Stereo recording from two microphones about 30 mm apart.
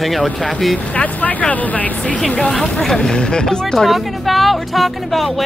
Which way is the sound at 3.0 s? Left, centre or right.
Left.